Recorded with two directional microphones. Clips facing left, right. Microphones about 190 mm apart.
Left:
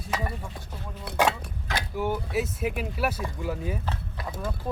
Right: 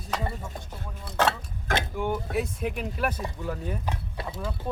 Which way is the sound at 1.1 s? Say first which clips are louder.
Left 1 dB; 15° left (ahead or behind).